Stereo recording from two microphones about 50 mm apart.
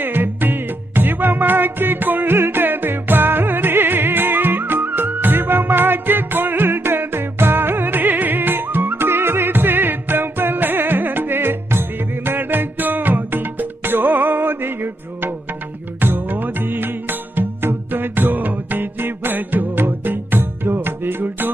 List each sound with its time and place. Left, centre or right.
0.0 s music: right